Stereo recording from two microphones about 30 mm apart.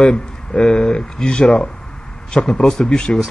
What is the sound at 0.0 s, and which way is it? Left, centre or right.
Speech, left.